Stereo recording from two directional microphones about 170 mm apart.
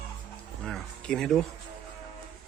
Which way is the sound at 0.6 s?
5° left (ahead or behind).